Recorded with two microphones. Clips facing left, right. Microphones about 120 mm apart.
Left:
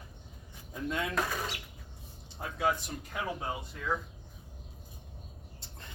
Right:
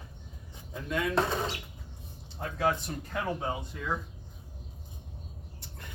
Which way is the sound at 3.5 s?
5° right (ahead or behind).